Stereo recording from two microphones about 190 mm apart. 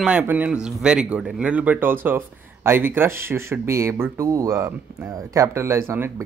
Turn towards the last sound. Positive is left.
turn(degrees=-15)  # may be behind; listen again after turning